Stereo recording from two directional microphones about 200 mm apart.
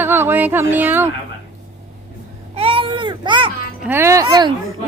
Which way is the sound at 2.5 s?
25° right (ahead or behind).